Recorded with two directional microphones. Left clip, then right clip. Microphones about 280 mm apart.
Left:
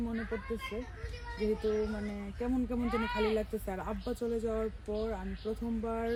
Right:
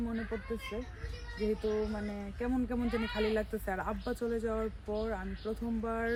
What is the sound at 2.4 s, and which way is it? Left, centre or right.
Speech, centre.